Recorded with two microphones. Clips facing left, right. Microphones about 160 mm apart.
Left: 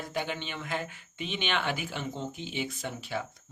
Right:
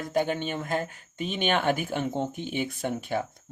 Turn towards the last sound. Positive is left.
turn(degrees=-50)  # may be behind; listen again after turning